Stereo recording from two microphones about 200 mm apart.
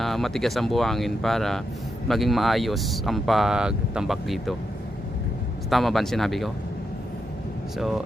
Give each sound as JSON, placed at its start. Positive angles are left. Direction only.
{"t": 0.0, "sound": "speech", "side_deg": 0}
{"t": 5.7, "sound": "speech", "side_deg": 0}